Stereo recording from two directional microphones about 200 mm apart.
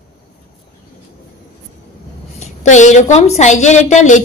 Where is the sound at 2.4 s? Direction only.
35° left (ahead or behind).